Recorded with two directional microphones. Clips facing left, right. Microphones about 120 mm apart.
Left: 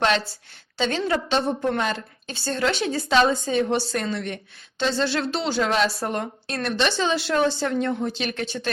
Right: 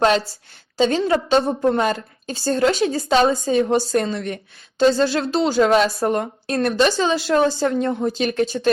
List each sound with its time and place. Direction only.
0.8 s a woman's voice: 35° right (ahead or behind)